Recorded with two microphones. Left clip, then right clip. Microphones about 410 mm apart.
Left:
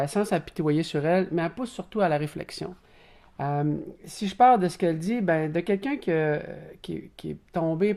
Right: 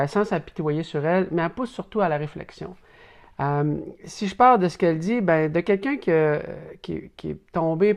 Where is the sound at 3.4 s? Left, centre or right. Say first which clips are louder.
Right 4 dB; right.